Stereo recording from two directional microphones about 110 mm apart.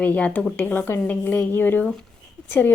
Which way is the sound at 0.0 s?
10° left (ahead or behind).